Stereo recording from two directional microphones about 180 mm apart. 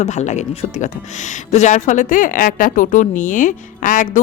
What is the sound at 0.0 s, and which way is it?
Speech, 40° left (ahead or behind).